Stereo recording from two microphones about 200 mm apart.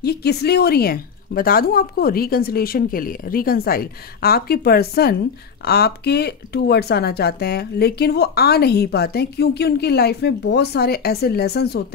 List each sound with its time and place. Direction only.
0.0 s speech: 55° left (ahead or behind)